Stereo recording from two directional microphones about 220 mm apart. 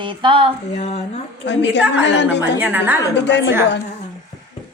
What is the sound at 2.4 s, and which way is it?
Speech, 5° right (ahead or behind).